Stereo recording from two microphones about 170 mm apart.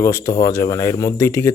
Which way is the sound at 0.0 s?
20° left (ahead or behind).